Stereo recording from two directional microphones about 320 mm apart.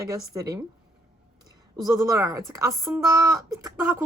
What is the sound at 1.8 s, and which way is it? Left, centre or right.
Speech, centre.